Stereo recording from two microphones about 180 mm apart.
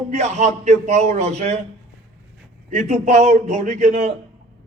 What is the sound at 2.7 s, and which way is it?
Speech, 40° right (ahead or behind).